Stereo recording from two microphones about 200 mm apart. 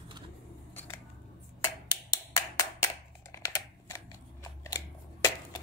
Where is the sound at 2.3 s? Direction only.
15° left (ahead or behind).